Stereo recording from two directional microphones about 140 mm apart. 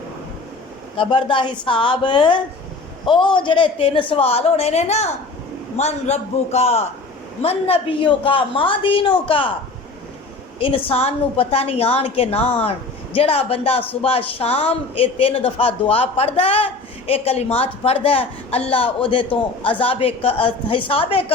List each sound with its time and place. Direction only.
0.9 s a woman's voice: 35° left (ahead or behind)
10.6 s a woman's voice: 40° left (ahead or behind)